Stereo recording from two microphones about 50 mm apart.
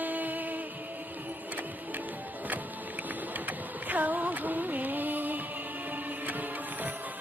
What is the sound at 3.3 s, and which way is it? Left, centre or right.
Music, right.